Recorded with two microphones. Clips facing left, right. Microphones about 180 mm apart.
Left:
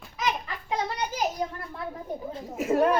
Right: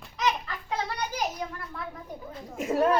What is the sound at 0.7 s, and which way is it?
A child's voice, 25° left (ahead or behind).